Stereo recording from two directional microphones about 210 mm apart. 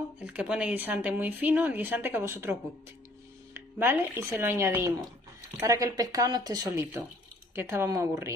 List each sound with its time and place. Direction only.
0.2 s speech: 5° right (ahead or behind)